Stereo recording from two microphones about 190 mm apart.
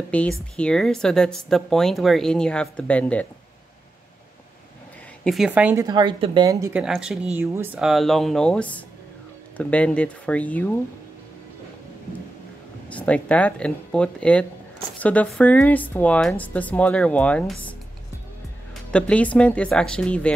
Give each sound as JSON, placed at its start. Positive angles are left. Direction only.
{"t": 0.1, "sound": "speech", "side_deg": 5}
{"t": 5.2, "sound": "a woman's voice", "side_deg": 0}
{"t": 5.9, "sound": "a woman's voice", "side_deg": -25}
{"t": 6.8, "sound": "speech", "side_deg": -5}
{"t": 12.9, "sound": "speech", "side_deg": 5}
{"t": 18.9, "sound": "speech", "side_deg": 5}